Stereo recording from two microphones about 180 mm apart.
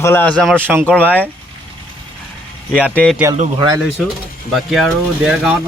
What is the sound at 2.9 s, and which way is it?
Speech, 5° left (ahead or behind).